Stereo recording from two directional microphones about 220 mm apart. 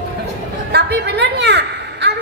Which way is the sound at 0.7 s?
50° right (ahead or behind).